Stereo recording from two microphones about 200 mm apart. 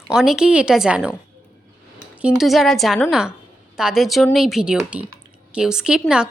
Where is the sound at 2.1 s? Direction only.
5° right (ahead or behind).